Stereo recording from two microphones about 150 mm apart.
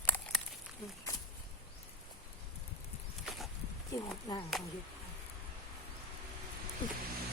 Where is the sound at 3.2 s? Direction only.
Centre (ahead or behind).